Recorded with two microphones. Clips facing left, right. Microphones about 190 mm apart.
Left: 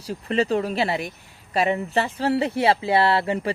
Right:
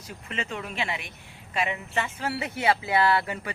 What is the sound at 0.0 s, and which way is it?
Speech, 35° left (ahead or behind).